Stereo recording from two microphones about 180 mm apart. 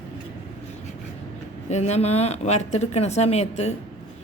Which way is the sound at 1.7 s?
40° left (ahead or behind).